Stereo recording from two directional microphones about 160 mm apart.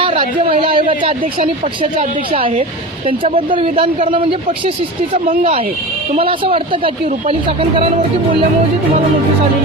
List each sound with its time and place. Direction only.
0.0 s a man's voice: 35° right (ahead or behind)
1.2 s speech: 45° right (ahead or behind)
1.8 s speech: 35° right (ahead or behind)
5.4 s speech: 35° right (ahead or behind)